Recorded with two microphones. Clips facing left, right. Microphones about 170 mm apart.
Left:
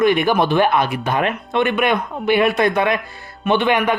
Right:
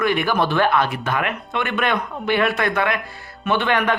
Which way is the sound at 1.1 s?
25° left (ahead or behind).